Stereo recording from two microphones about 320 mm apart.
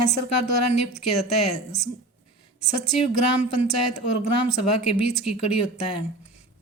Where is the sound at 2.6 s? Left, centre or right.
Left.